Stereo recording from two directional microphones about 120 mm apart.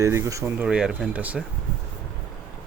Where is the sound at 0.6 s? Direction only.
5° right (ahead or behind).